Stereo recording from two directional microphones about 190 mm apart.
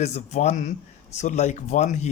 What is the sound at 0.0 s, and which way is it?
Speech, 35° left (ahead or behind).